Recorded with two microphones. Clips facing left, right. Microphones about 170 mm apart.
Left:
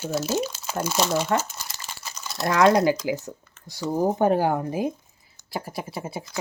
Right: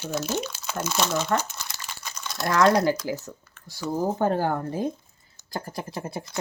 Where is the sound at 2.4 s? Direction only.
25° left (ahead or behind); by 6.3 s 5° left (ahead or behind).